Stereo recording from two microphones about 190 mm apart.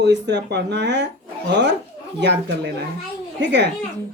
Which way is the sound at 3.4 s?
65° right (ahead or behind).